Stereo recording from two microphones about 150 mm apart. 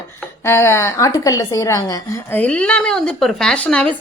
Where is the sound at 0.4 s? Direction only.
15° left (ahead or behind).